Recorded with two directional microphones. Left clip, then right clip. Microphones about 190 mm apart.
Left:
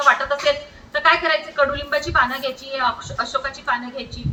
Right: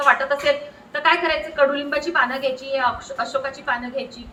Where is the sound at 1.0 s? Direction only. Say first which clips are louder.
Left 2 dB; 20° right (ahead or behind).